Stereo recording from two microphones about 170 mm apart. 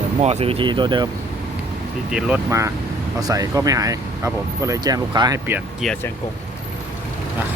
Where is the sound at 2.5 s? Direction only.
15° right (ahead or behind).